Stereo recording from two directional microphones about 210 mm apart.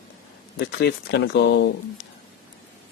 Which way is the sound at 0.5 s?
50° left (ahead or behind).